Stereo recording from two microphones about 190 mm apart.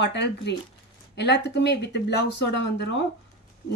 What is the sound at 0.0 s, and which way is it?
A woman's voice, 65° left (ahead or behind).